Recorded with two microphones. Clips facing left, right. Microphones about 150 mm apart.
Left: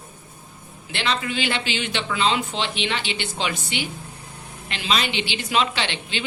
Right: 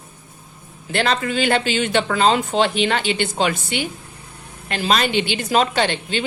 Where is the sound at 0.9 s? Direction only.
45° right (ahead or behind).